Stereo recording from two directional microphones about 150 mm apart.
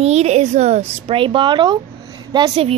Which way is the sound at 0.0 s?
45° right (ahead or behind).